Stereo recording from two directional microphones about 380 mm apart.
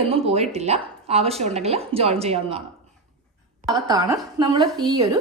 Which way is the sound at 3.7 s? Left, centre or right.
Centre.